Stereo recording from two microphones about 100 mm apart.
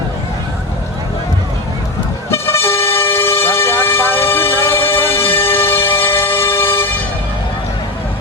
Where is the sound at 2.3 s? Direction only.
25° left (ahead or behind).